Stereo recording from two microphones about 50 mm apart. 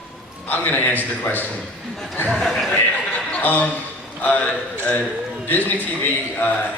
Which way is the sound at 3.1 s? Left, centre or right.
Left.